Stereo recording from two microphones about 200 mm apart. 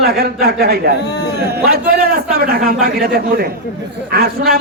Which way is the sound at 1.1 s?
55° left (ahead or behind).